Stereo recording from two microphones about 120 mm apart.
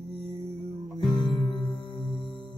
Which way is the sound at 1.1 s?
40° left (ahead or behind).